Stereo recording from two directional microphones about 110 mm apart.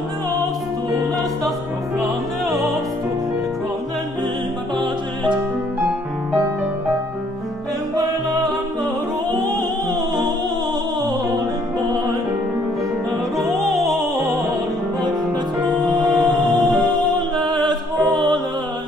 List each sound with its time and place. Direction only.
15.9 s music: 45° right (ahead or behind)